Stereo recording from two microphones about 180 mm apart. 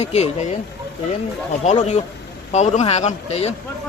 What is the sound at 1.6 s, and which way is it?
Speech, 40° left (ahead or behind).